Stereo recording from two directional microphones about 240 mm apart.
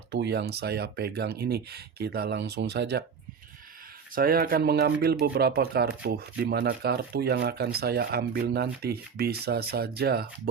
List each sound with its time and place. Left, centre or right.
0.1 s speech: right
4.1 s speech: right